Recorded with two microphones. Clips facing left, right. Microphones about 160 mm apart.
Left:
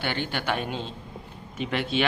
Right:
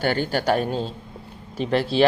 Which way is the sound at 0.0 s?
40° right (ahead or behind).